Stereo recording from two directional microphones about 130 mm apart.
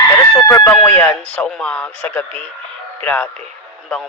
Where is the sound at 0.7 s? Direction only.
10° left (ahead or behind).